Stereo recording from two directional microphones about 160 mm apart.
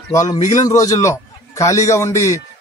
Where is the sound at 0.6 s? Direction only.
20° left (ahead or behind).